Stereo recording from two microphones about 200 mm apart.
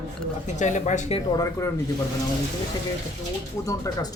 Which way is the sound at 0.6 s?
35° left (ahead or behind).